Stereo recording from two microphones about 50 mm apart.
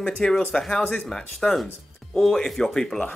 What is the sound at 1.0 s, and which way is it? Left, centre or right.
Speech, centre.